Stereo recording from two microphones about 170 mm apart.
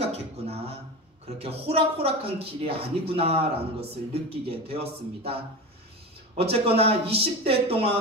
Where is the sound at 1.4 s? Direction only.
35° right (ahead or behind).